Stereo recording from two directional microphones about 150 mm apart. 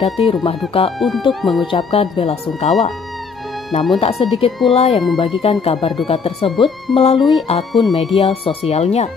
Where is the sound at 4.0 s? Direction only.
40° left (ahead or behind).